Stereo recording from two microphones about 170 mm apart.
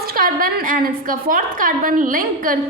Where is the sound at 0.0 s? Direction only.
60° right (ahead or behind).